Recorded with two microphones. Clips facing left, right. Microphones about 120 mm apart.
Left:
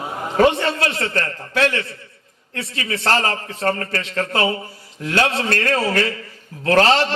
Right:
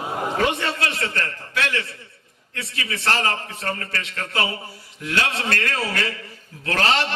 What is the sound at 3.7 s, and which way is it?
A man's voice, 40° left (ahead or behind).